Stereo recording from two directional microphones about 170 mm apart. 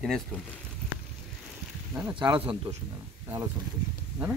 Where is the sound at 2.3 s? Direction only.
30° right (ahead or behind).